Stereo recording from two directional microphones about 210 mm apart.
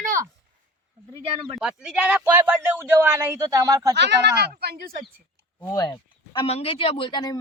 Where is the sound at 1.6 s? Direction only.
5° right (ahead or behind).